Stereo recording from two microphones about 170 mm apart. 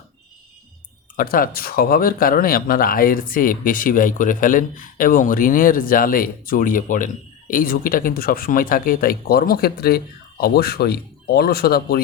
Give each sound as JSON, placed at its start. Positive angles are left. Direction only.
{"t": 1.1, "sound": "speech", "side_deg": 60}